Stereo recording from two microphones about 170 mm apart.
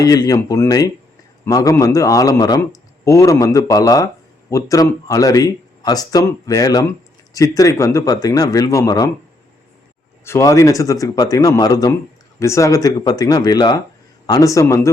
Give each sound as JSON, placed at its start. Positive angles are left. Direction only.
{"t": 0.0, "sound": "speech", "side_deg": 20}
{"t": 10.2, "sound": "speech", "side_deg": 15}